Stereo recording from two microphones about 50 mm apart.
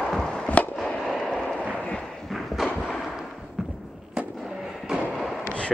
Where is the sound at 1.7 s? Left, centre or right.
Left.